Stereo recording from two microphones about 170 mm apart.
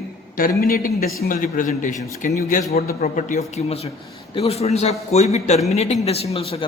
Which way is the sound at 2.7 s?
60° left (ahead or behind).